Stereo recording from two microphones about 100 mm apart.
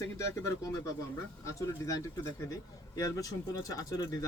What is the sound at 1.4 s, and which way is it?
Speech, 35° left (ahead or behind).